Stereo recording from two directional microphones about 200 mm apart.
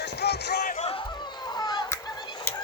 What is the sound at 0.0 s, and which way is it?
Basketball bounce, 55° left (ahead or behind).